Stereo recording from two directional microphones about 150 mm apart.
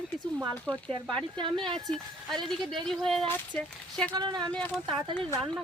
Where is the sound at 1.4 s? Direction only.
30° right (ahead or behind).